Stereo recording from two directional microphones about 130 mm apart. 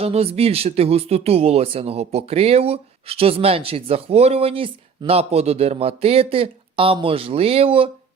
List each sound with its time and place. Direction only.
0.0 s speech: 50° right (ahead or behind)